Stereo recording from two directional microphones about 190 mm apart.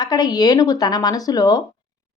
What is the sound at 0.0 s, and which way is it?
A woman's voice, 20° left (ahead or behind).